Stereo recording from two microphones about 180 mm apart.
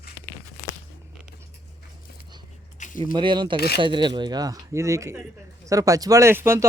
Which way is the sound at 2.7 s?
45° left (ahead or behind).